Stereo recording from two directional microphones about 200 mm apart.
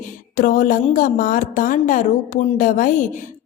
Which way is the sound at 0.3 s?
40° left (ahead or behind).